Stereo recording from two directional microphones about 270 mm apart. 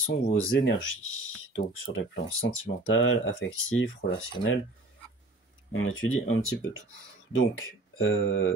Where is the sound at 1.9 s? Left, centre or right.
Left.